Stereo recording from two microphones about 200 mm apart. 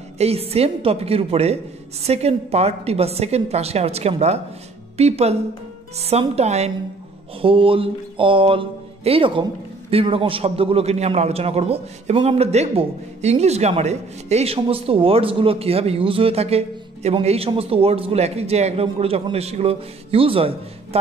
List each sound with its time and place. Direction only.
0.2 s a woman's voice: 30° right (ahead or behind)